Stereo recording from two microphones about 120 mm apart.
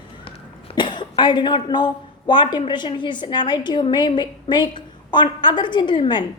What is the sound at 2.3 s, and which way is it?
A woman's voice, 40° left (ahead or behind).